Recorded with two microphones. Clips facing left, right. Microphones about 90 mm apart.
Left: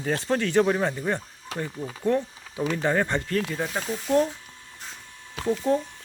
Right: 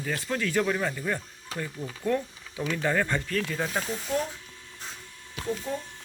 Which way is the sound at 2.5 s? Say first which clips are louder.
Left 4 dB; 40° left (ahead or behind).